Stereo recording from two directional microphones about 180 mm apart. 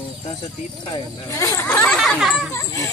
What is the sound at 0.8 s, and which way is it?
Speech, 20° left (ahead or behind).